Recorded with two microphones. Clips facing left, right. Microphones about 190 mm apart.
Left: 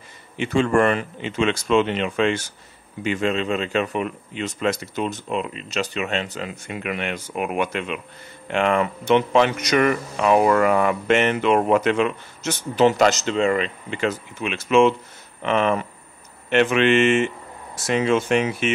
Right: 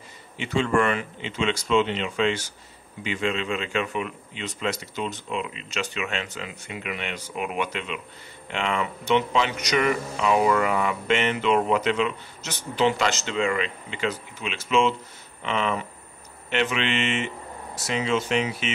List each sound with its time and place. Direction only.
0.4 s speech: 50° left (ahead or behind)